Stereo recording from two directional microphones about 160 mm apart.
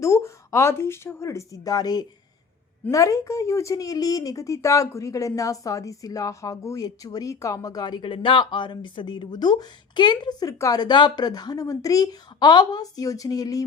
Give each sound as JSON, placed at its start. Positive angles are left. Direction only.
{"t": 0.0, "sound": "a woman's voice", "side_deg": 20}